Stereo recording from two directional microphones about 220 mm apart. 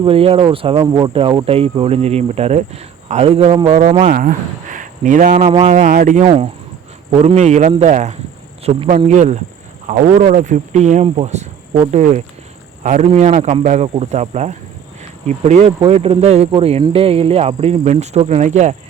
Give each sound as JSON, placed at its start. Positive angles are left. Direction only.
{"t": 0.0, "sound": "speech", "side_deg": -25}